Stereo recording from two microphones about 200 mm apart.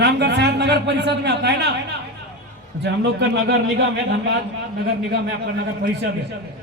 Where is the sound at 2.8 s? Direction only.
60° right (ahead or behind).